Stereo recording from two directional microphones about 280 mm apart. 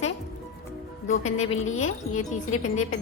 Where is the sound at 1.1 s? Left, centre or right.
Left.